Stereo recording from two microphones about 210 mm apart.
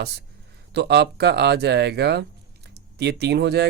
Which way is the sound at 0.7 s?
50° right (ahead or behind).